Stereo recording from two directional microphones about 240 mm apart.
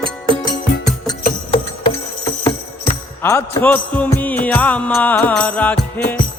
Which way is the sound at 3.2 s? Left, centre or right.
Centre.